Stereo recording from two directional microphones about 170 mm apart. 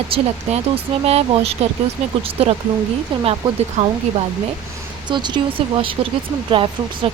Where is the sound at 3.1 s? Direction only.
30° right (ahead or behind).